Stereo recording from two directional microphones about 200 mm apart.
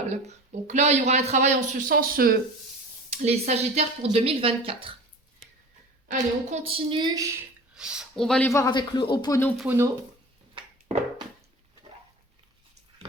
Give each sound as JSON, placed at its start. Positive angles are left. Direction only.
{"t": 0.1, "sound": "speech", "side_deg": -35}
{"t": 3.1, "sound": "speech", "side_deg": -35}
{"t": 6.1, "sound": "speech", "side_deg": -35}
{"t": 7.8, "sound": "speech", "side_deg": -5}
{"t": 8.4, "sound": "speech", "side_deg": 15}
{"t": 9.6, "sound": "speech", "side_deg": -10}